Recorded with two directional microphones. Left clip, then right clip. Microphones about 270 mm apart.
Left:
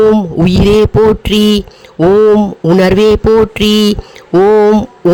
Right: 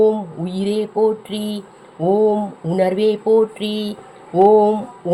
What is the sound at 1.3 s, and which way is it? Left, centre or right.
Speech, left.